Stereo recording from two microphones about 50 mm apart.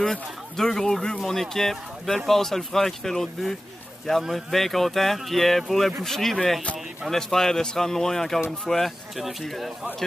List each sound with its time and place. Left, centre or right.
0.0 s speech: centre